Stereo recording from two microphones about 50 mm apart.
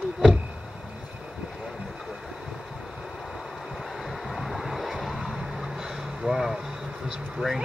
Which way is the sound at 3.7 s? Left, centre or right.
Centre.